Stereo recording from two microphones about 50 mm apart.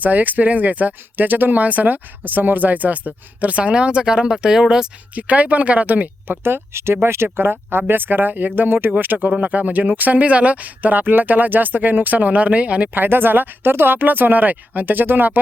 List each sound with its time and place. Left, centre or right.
0.0 s speech: right; by 4.9 s centre
5.1 s speech: right
6.4 s speech: right
12.9 s speech: right